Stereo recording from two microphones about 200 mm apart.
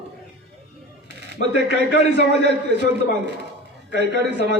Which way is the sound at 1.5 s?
55° right (ahead or behind).